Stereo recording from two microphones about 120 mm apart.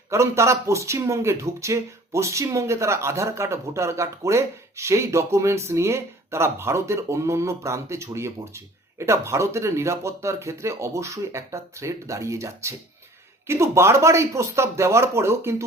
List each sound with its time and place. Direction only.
0.1 s speech: 25° right (ahead or behind)